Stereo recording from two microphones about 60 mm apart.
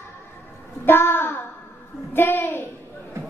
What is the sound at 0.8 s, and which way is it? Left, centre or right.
Child singing, left.